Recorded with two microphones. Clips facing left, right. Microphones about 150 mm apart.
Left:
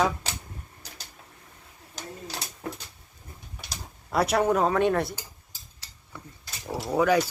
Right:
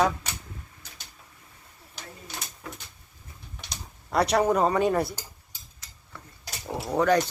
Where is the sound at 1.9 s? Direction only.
35° left (ahead or behind).